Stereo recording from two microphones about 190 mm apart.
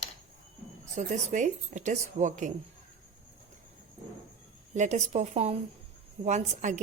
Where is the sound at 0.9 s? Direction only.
40° right (ahead or behind).